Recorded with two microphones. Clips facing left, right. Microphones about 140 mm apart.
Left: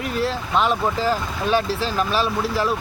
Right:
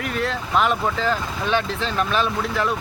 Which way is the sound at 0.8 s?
5° left (ahead or behind).